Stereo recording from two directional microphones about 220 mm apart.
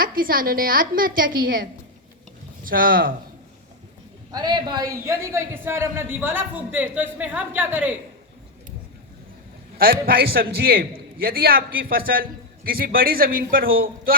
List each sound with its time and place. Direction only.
0.0 s a woman's voice: 40° right (ahead or behind)
2.6 s a woman's voice: 40° right (ahead or behind)
4.3 s a man's voice: 20° right (ahead or behind)
9.7 s a man's voice: 45° right (ahead or behind)